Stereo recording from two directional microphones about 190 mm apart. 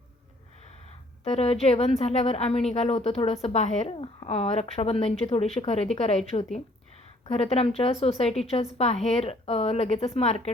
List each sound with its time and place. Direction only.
1.2 s a woman's voice: 35° left (ahead or behind)